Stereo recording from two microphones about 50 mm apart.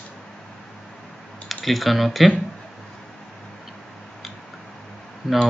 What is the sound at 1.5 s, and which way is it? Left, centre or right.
Speech, centre.